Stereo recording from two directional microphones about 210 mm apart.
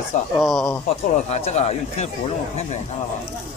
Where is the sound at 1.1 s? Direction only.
30° left (ahead or behind).